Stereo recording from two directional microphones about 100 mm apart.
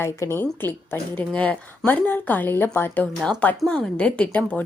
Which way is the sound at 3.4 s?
10° left (ahead or behind).